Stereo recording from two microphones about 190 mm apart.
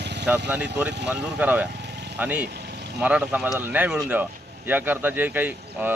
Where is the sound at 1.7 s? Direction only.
65° right (ahead or behind).